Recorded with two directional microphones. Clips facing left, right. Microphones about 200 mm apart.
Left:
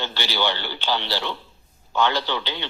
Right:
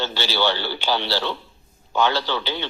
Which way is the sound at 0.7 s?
10° right (ahead or behind).